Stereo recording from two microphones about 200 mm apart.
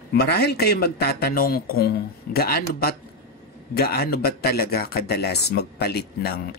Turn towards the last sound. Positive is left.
turn(degrees=50)  # may be behind; listen again after turning